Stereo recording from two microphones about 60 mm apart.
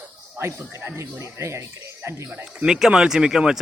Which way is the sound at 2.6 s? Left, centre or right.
Centre.